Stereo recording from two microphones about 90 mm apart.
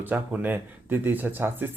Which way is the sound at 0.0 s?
20° right (ahead or behind).